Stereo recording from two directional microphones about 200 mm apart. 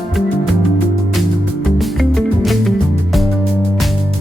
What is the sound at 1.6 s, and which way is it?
Music, centre (ahead or behind).